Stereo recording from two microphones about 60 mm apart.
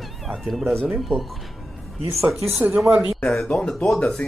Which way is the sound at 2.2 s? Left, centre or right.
Centre.